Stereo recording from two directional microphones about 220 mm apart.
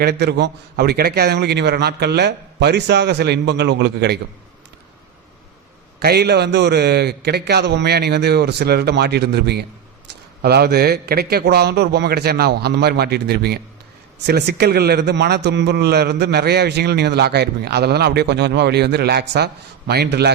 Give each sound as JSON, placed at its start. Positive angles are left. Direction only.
{"t": 0.0, "sound": "a man's voice", "side_deg": -45}
{"t": 6.0, "sound": "a man's voice", "side_deg": -45}